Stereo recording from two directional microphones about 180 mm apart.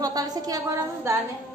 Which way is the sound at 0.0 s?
20° right (ahead or behind).